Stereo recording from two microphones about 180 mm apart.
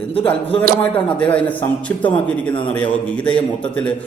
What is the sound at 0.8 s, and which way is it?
Speech, 10° left (ahead or behind).